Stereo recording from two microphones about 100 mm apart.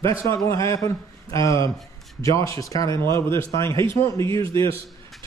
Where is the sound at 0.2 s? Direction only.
30° left (ahead or behind).